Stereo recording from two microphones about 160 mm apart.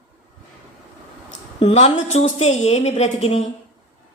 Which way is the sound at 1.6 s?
35° left (ahead or behind).